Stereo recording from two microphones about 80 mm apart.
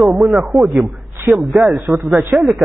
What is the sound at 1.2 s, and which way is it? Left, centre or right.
Speech, right.